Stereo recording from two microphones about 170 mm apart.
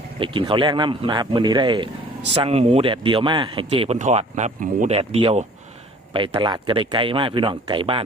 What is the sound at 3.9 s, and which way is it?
Speech, 40° right (ahead or behind).